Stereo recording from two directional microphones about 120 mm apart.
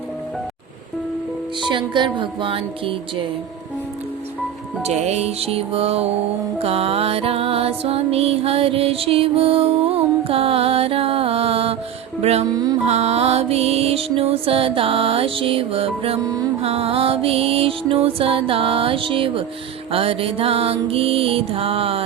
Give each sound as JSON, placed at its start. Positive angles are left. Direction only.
{"t": 1.6, "sound": "music", "side_deg": -40}
{"t": 4.8, "sound": "music", "side_deg": -65}
{"t": 12.5, "sound": "music", "side_deg": -35}
{"t": 12.8, "sound": "music", "side_deg": -60}